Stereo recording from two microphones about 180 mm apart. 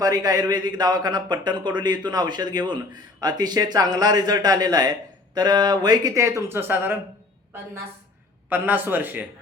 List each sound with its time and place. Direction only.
0.0 s a man's voice: 20° right (ahead or behind)
8.4 s speech: 10° right (ahead or behind)